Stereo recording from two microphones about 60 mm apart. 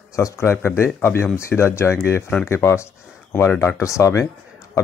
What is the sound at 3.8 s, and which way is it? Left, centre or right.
Speech, left.